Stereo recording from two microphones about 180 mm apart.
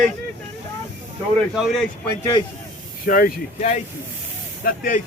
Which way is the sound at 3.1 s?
50° left (ahead or behind).